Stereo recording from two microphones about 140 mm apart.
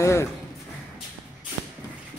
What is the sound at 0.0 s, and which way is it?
Speech, 20° left (ahead or behind).